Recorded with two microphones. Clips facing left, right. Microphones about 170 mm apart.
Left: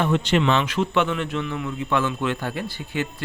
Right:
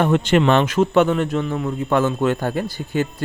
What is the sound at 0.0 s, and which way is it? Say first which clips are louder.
Speech: right 4 dB; 50° right (ahead or behind).